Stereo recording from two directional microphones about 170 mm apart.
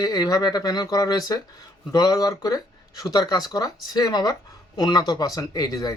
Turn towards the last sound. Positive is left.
turn(degrees=20)  # may be behind; listen again after turning